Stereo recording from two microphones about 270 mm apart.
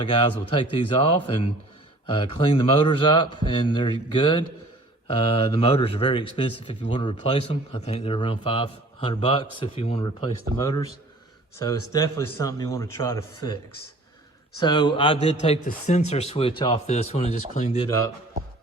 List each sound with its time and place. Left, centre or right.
0.0 s a man's voice: centre
2.1 s a man's voice: centre
14.6 s speech: centre